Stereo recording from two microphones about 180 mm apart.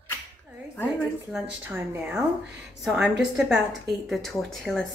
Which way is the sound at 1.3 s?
Centre (ahead or behind).